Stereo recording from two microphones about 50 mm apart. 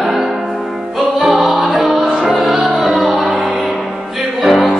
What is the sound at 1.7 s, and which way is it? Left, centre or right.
Music, centre.